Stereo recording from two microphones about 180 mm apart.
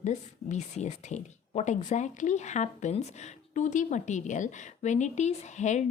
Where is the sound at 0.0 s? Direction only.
40° left (ahead or behind).